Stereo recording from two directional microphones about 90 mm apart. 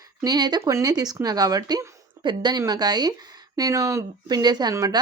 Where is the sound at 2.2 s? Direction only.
60° right (ahead or behind); by 5.0 s 40° right (ahead or behind).